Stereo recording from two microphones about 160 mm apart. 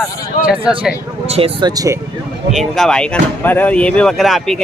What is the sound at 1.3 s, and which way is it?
Speech, 35° right (ahead or behind).